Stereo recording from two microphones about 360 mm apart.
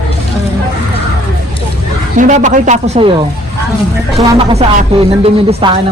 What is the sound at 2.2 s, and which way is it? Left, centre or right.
Speech, centre.